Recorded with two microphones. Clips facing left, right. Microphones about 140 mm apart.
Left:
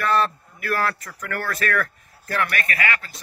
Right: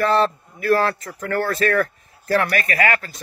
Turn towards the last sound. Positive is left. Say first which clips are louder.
# right 5 dB
turn(degrees=-40)  # may be behind; listen again after turning